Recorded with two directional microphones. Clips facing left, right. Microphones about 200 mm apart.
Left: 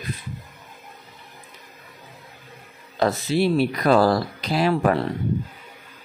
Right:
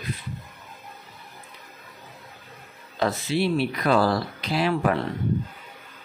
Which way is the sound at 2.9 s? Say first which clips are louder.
Left 3 dB; 40° left (ahead or behind).